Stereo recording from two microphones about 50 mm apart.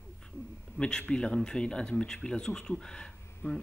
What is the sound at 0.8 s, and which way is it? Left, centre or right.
A man's voice, centre.